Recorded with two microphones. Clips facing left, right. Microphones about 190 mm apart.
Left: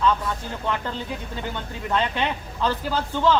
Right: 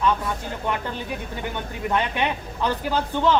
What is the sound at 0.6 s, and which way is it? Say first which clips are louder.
Speech: left 1 dB; 15° right (ahead or behind).